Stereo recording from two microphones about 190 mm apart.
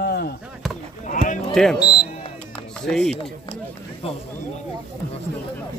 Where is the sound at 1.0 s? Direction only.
40° left (ahead or behind).